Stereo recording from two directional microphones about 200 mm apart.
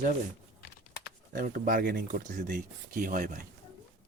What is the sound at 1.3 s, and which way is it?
Speech, 45° right (ahead or behind).